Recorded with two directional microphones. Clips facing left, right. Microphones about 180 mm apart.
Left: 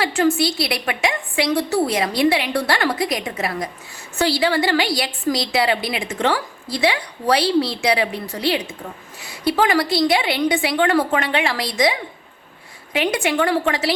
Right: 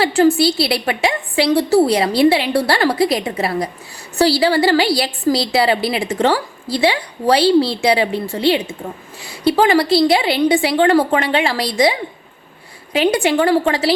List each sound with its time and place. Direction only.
0.0 s a woman's voice: 35° right (ahead or behind)